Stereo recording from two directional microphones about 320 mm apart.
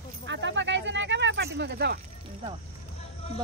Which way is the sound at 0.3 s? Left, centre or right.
Right.